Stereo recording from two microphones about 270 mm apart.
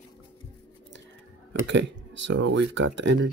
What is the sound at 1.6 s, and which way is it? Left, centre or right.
Speech, right.